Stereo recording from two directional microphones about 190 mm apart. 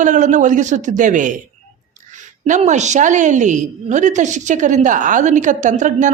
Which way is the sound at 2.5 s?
40° right (ahead or behind).